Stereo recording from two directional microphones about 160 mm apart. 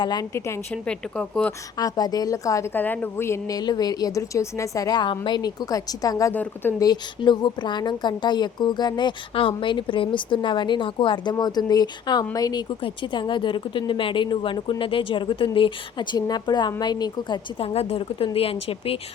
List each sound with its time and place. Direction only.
0.0 s a woman's voice: 25° left (ahead or behind); by 1.5 s 10° left (ahead or behind)
1.8 s speech: 25° left (ahead or behind)
6.3 s a woman's voice: 10° left (ahead or behind); by 18.9 s 35° left (ahead or behind)